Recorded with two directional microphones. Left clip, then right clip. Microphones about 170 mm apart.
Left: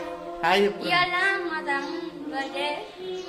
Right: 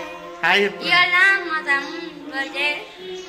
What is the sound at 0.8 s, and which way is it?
Child singing, 20° left (ahead or behind).